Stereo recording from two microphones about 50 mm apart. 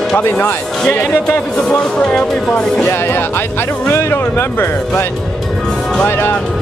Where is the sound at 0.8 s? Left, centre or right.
Left.